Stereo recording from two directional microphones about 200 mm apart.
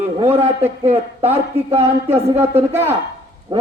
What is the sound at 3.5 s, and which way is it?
Speech, 25° right (ahead or behind).